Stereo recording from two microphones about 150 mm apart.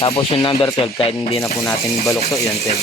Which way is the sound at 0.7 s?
35° left (ahead or behind).